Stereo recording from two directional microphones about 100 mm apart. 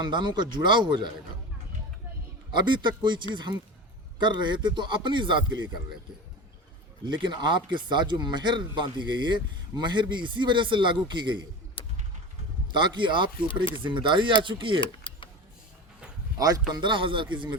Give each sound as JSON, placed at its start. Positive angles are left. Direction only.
{"t": 0.0, "sound": "speech", "side_deg": -50}
{"t": 2.5, "sound": "speech", "side_deg": -50}
{"t": 7.0, "sound": "speech", "side_deg": -50}
{"t": 12.7, "sound": "speech", "side_deg": -50}
{"t": 14.8, "sound": "a sound", "side_deg": 60}
{"t": 16.7, "sound": "speech", "side_deg": -55}